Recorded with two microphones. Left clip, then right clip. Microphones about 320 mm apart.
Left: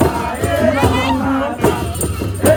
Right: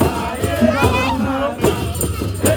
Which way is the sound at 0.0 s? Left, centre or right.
Centre.